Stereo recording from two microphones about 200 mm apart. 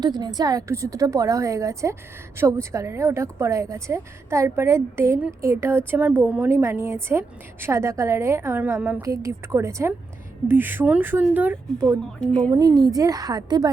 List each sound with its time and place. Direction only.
0.0 s a woman's voice: 20° right (ahead or behind)
12.2 s speech: 5° left (ahead or behind)
12.5 s a woman's voice: 15° right (ahead or behind)